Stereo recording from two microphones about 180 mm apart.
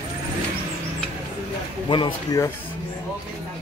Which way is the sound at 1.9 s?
25° left (ahead or behind).